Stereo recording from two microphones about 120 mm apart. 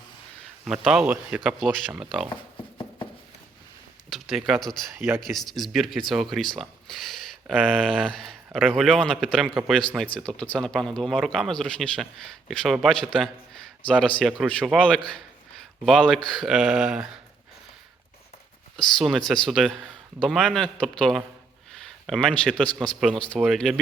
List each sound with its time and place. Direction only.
1.0 s speech: 15° right (ahead or behind)
1.5 s speech: centre (ahead or behind)
2.3 s a sound: 45° left (ahead or behind)
4.1 s speech: centre (ahead or behind)
4.9 s speech: 20° right (ahead or behind)
5.2 s speech: centre (ahead or behind)
14.8 s a man's voice: 10° left (ahead or behind)
18.8 s speech: centre (ahead or behind)